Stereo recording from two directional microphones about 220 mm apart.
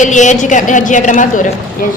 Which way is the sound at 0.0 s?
35° left (ahead or behind).